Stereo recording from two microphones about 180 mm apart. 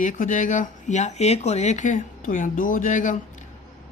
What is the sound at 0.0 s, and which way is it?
Speech, 45° left (ahead or behind).